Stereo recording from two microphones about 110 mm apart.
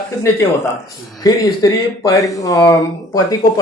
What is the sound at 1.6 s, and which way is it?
A man's voice, 35° left (ahead or behind).